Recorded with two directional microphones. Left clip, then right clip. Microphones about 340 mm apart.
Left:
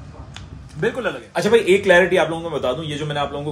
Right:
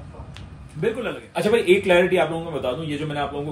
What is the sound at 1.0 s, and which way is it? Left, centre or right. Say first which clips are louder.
A man's voice: left 3 dB; centre.